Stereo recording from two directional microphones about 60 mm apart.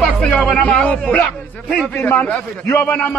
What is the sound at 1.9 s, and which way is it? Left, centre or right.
Speech, left.